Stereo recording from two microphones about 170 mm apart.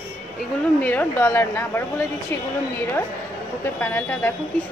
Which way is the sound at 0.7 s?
10° left (ahead or behind).